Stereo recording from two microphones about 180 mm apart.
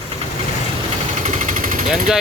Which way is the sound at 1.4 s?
50° right (ahead or behind).